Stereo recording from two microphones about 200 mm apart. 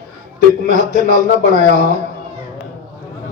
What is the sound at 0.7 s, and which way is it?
Speech, 40° right (ahead or behind).